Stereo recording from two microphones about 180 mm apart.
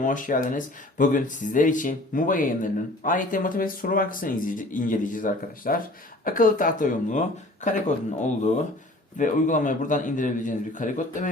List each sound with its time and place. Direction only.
0.0 s speech: 45° left (ahead or behind)